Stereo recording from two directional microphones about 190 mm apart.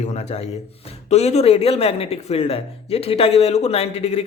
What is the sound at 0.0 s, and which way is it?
Speech, 35° left (ahead or behind).